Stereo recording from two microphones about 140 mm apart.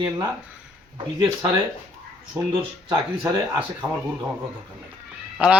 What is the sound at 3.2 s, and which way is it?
Speech, 25° right (ahead or behind).